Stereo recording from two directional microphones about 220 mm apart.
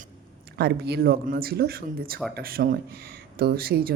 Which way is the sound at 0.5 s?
45° right (ahead or behind).